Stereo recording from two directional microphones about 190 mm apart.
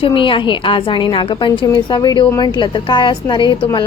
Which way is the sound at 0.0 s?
25° left (ahead or behind).